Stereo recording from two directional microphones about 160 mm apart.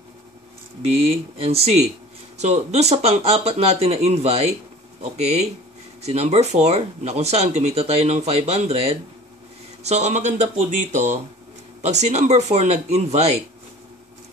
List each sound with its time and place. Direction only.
0.8 s speech: 40° right (ahead or behind)